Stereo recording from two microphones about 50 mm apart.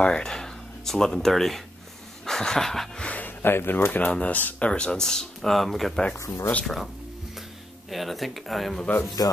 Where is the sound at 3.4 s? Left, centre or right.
Left.